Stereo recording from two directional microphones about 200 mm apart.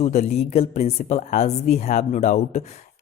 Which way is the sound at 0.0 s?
35° left (ahead or behind).